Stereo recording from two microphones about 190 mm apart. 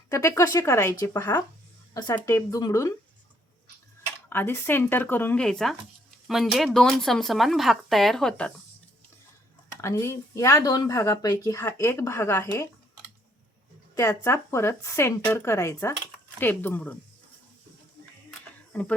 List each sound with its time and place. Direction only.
0.1 s a woman's voice: 15° left (ahead or behind)
4.3 s speech: 10° left (ahead or behind)
9.8 s a woman's voice: 15° left (ahead or behind)
13.9 s a woman's voice: 15° left (ahead or behind)
18.7 s speech: 5° left (ahead or behind)